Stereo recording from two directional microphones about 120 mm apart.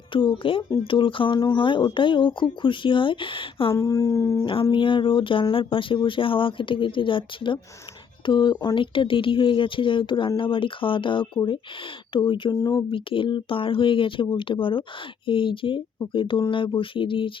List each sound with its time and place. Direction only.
0.1 s speech: 45° left (ahead or behind)
3.7 s speech: 25° left (ahead or behind)
4.7 s speech: 45° left (ahead or behind)